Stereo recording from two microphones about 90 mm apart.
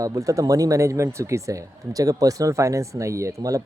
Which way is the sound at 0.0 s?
40° right (ahead or behind).